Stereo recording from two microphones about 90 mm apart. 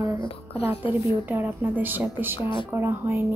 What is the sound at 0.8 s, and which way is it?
Speech, 70° left (ahead or behind).